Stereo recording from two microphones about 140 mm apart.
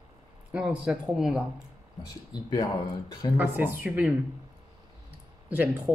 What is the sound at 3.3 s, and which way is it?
Speech, 15° right (ahead or behind).